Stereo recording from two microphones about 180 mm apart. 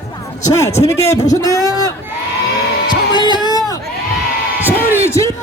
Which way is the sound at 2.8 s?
25° left (ahead or behind).